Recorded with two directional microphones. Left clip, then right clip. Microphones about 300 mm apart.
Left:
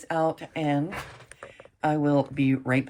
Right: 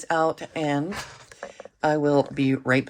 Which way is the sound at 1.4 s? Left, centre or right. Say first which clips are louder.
Right 9 dB; left.